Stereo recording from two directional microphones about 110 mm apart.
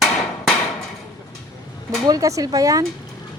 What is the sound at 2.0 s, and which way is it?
Speech, 35° right (ahead or behind).